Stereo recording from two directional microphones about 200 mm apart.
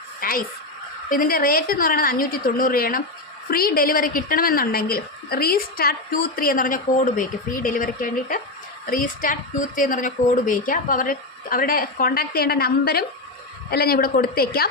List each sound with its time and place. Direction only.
0.2 s a woman's voice: 45° left (ahead or behind)